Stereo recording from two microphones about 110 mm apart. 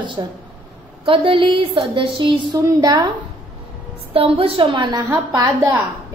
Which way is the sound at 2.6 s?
35° right (ahead or behind).